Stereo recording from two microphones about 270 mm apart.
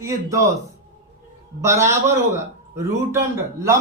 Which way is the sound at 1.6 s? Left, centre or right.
Centre.